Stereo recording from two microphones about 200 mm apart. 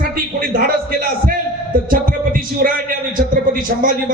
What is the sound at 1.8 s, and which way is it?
A man's voice, 45° right (ahead or behind).